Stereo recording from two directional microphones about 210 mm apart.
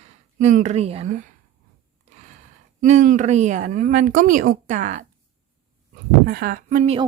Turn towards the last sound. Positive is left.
turn(degrees=-35)  # may be behind; listen again after turning